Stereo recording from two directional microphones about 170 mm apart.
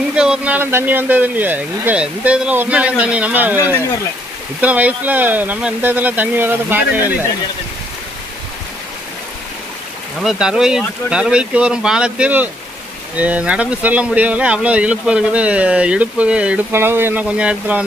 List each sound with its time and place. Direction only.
0.1 s speech: 5° right (ahead or behind)
4.6 s speech: 10° right (ahead or behind)
10.2 s speech: 5° right (ahead or behind)